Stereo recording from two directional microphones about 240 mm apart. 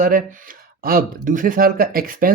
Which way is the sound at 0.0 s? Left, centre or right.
Right.